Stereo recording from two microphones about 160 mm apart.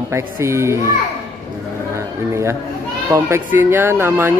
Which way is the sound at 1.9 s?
15° right (ahead or behind).